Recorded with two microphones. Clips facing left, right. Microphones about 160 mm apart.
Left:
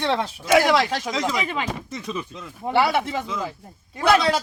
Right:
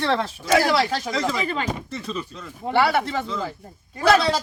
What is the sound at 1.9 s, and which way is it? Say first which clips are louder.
Speech: even; 15° left (ahead or behind).